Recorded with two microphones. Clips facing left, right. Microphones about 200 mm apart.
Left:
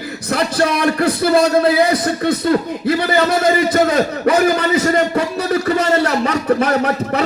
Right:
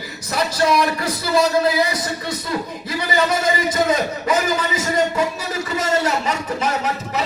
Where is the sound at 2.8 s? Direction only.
60° left (ahead or behind).